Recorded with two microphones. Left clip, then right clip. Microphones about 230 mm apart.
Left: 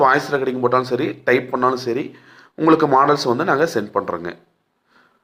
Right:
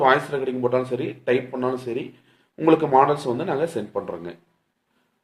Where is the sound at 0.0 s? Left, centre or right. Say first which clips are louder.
Left 3 dB; centre.